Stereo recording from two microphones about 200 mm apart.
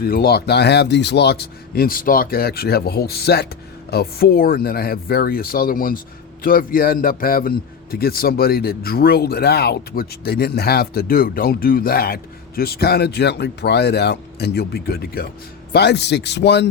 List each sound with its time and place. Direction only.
0.0 s a man's voice: 50° left (ahead or behind)